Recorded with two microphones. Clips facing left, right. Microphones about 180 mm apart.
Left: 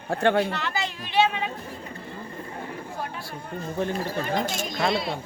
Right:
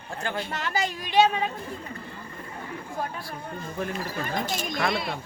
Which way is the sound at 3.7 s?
30° left (ahead or behind).